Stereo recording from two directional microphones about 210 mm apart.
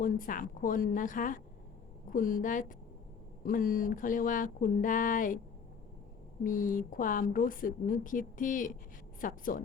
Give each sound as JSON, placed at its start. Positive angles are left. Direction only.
{"t": 0.0, "sound": "a woman's voice", "side_deg": 40}
{"t": 6.4, "sound": "a woman's voice", "side_deg": 40}